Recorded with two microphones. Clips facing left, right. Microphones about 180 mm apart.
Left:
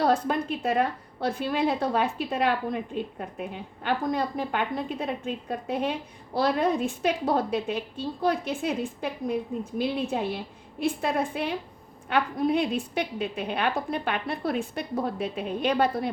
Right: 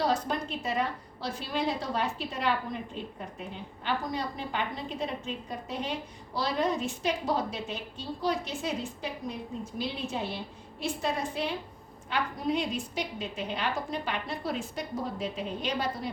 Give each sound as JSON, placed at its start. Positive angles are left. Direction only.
{"t": 0.0, "sound": "a woman's voice", "side_deg": 55}